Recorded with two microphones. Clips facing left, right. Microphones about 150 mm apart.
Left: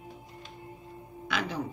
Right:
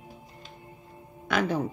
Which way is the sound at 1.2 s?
50° right (ahead or behind).